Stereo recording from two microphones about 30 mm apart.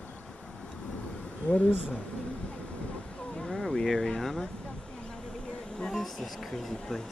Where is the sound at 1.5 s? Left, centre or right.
Left.